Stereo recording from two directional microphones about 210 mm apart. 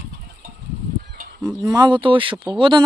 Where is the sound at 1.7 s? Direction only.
20° right (ahead or behind).